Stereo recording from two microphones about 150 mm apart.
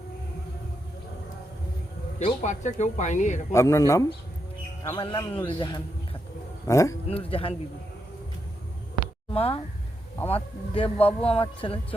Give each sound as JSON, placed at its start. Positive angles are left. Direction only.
{"t": 2.1, "sound": "speech", "side_deg": 50}
{"t": 3.5, "sound": "speech", "side_deg": 20}
{"t": 4.8, "sound": "speech", "side_deg": 35}
{"t": 6.7, "sound": "speech", "side_deg": 20}
{"t": 7.1, "sound": "speech", "side_deg": 40}
{"t": 9.3, "sound": "speech", "side_deg": 40}